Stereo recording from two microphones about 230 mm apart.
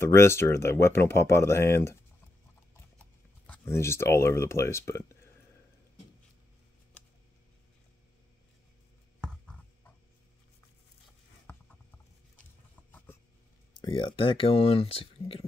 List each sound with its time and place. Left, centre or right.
0.0 s speech: centre
3.4 s speech: centre
11.5 s patter: centre
12.9 s a sound: centre
13.7 s speech: centre